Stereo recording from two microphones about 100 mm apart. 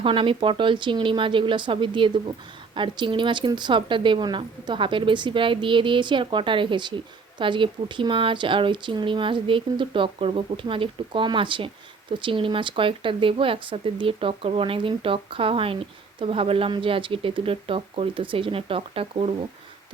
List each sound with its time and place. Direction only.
0.0 s speech: 65° right (ahead or behind)